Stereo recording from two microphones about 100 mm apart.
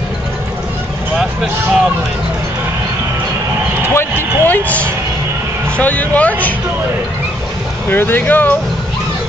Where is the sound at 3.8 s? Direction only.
25° left (ahead or behind).